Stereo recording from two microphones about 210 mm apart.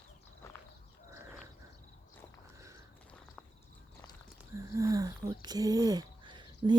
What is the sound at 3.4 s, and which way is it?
Walk, centre (ahead or behind).